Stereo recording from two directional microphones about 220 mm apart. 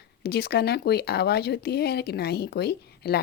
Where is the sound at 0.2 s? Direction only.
45° left (ahead or behind).